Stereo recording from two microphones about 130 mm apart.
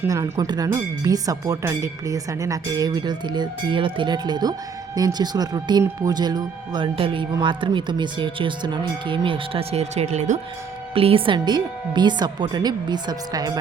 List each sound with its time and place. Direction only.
0.1 s speech: 30° right (ahead or behind); by 10.4 s 65° right (ahead or behind)
10.9 s speech: 45° right (ahead or behind)